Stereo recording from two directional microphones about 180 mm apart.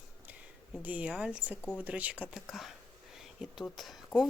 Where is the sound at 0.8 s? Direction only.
10° right (ahead or behind).